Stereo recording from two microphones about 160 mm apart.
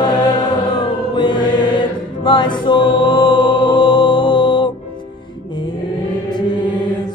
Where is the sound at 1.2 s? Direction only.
25° left (ahead or behind).